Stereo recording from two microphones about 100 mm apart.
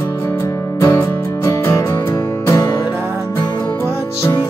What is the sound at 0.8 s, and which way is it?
Music, 30° left (ahead or behind).